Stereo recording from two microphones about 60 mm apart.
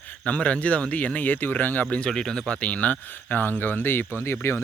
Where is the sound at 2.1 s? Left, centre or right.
Centre.